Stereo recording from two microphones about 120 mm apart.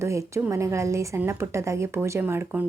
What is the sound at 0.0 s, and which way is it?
A woman's voice, 25° right (ahead or behind).